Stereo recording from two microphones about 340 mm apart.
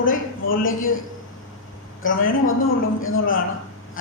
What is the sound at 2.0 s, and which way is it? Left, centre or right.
Speech, left.